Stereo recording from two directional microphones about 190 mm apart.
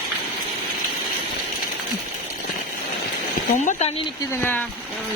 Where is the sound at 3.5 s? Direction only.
40° left (ahead or behind).